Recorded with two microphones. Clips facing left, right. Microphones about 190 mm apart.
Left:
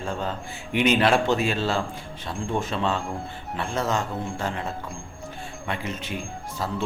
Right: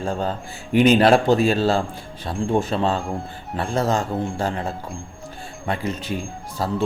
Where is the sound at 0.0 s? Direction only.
35° right (ahead or behind).